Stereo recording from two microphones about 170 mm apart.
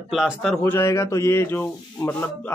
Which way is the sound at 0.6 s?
15° left (ahead or behind).